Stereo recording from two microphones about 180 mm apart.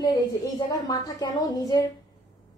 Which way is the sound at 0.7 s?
20° left (ahead or behind).